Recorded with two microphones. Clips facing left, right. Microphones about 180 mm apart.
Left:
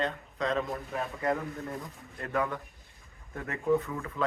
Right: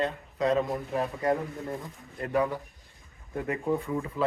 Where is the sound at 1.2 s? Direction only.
30° right (ahead or behind).